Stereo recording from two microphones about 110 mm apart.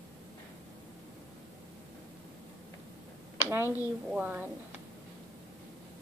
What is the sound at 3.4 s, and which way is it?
A woman's voice, 20° right (ahead or behind).